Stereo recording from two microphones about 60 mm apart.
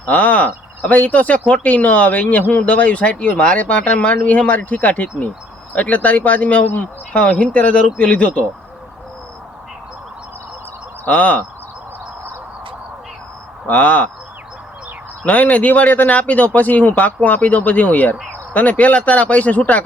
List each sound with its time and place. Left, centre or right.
0.0 s speech: left
11.0 s speech: left
13.7 s speech: left
15.2 s speech: left